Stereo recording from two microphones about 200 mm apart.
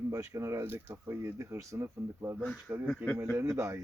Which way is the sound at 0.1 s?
15° right (ahead or behind).